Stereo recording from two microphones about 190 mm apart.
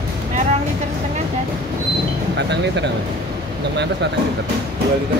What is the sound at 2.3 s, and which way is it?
Speech, 65° right (ahead or behind).